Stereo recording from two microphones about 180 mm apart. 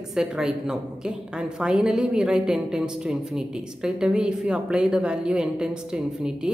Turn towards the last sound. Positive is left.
turn(degrees=-5)  # may be behind; listen again after turning